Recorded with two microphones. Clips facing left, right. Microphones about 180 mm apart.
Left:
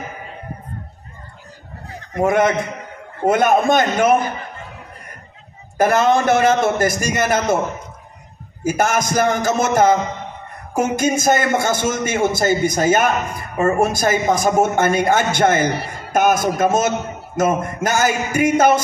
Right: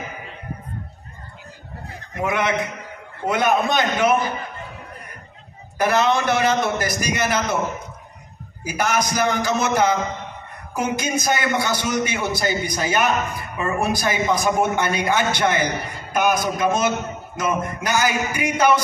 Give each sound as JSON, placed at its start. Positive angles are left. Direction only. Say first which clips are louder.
{"t": 2.1, "sound": "a man's voice", "louder": "left 6 dB", "side_deg": 45}
{"t": 5.8, "sound": "a man's voice", "louder": "left 4 dB", "side_deg": 50}
{"t": 8.6, "sound": "a man's voice", "louder": "left 4 dB", "side_deg": 45}